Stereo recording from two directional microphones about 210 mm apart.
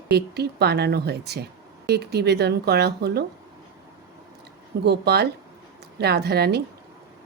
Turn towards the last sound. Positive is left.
turn(degrees=-50)  # may be behind; listen again after turning